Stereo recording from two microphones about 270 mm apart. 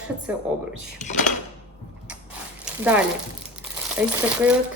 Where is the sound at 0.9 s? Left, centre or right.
Left.